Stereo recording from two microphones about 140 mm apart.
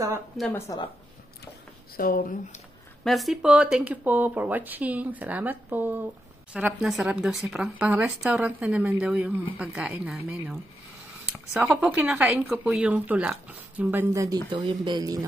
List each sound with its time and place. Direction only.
0.5 s speech: 20° left (ahead or behind)
2.0 s speech: 90° left
3.0 s a woman's voice: centre (ahead or behind)
14.1 s speech: 25° right (ahead or behind)